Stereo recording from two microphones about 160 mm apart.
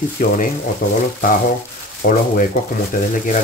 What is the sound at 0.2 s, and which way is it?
Speech, 55° left (ahead or behind).